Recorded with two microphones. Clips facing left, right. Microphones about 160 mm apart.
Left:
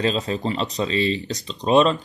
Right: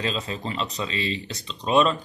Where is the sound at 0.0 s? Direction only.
35° left (ahead or behind).